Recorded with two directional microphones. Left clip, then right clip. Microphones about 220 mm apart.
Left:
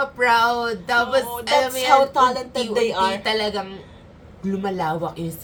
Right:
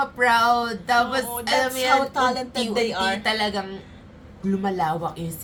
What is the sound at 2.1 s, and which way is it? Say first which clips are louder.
Speech: left 4 dB; 20° left (ahead or behind).